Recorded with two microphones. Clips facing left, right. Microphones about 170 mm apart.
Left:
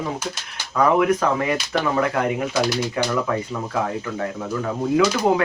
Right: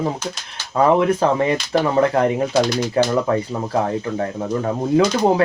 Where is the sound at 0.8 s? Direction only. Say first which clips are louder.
Right 2 dB; 30° right (ahead or behind).